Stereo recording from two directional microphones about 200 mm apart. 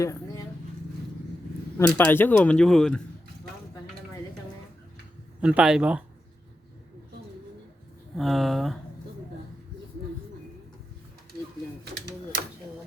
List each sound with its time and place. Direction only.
0.0 s speech: 15° left (ahead or behind)
1.9 s speech: 10° left (ahead or behind)
5.4 s speech: 5° right (ahead or behind)
8.1 s speech: centre (ahead or behind)
11.9 s a sound: 55° right (ahead or behind)